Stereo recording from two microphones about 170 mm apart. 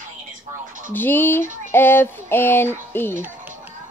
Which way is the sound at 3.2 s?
10° right (ahead or behind).